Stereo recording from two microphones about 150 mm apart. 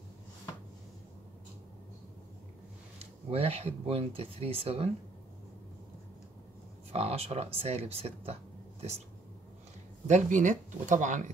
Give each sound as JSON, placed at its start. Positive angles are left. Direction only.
{"t": 3.0, "sound": "speech", "side_deg": -40}
{"t": 6.9, "sound": "speech", "side_deg": -45}
{"t": 10.0, "sound": "speech", "side_deg": -55}